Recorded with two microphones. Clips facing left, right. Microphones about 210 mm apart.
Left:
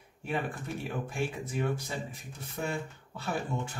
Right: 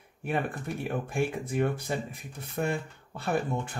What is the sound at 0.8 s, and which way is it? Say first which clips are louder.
Speech: right 5 dB; 55° right (ahead or behind).